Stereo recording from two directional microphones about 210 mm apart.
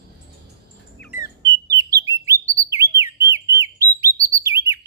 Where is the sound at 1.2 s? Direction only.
15° right (ahead or behind).